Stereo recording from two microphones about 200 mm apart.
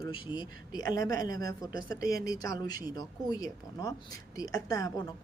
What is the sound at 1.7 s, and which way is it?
Speech, 45° right (ahead or behind).